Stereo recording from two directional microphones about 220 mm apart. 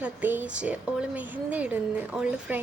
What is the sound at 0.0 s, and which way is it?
Speech, 10° right (ahead or behind).